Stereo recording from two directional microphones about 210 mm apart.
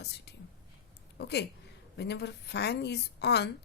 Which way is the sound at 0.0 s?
50° left (ahead or behind).